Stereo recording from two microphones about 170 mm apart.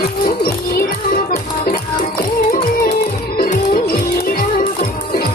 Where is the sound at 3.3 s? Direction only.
60° left (ahead or behind).